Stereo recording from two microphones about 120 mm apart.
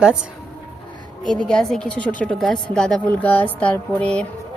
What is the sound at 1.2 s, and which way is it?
A woman's voice, 5° left (ahead or behind).